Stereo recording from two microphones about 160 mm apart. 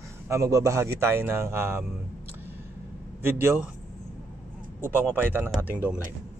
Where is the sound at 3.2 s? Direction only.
15° right (ahead or behind).